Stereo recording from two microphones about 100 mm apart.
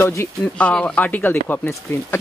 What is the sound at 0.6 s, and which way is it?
Speech, 10° left (ahead or behind).